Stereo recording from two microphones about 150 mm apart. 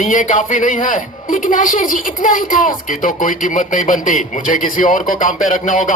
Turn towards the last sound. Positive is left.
turn(degrees=60)  # may be behind; listen again after turning